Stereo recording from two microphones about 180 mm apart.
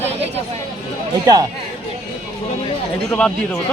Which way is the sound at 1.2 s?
20° right (ahead or behind).